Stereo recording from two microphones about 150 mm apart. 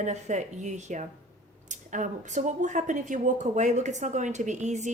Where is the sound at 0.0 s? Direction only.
50° right (ahead or behind).